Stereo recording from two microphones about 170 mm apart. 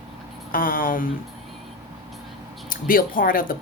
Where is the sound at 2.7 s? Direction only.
55° left (ahead or behind).